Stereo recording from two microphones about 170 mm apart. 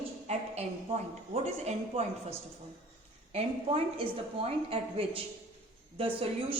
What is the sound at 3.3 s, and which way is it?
A woman's voice, 35° right (ahead or behind).